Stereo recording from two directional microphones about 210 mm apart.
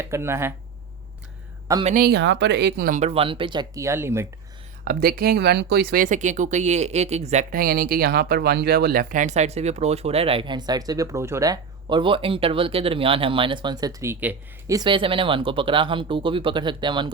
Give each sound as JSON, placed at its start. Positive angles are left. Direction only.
{"t": 0.0, "sound": "speech", "side_deg": -10}
{"t": 1.8, "sound": "speech", "side_deg": -35}
{"t": 2.0, "sound": "speech", "side_deg": -55}
{"t": 3.0, "sound": "speech", "side_deg": -30}
{"t": 4.9, "sound": "speech", "side_deg": -45}